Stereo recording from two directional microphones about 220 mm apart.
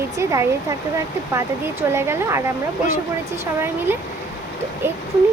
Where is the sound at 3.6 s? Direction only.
10° right (ahead or behind).